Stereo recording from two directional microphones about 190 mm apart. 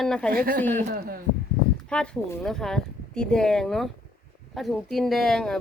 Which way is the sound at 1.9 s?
5° left (ahead or behind).